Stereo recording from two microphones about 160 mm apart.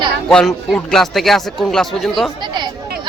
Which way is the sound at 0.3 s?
5° left (ahead or behind).